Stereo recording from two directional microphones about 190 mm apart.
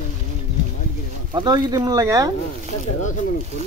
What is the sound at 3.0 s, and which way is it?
Speech, 40° left (ahead or behind).